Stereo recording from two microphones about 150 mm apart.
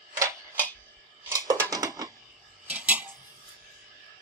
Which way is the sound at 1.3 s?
20° right (ahead or behind).